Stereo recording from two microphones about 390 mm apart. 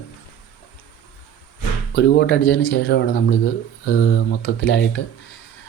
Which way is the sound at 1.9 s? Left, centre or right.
Left.